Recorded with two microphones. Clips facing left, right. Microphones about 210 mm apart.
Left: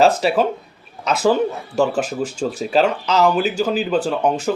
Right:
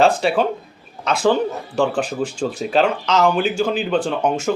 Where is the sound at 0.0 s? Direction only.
5° left (ahead or behind).